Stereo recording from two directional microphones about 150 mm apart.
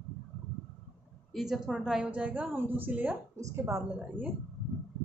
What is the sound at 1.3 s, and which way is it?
A woman's voice, centre (ahead or behind).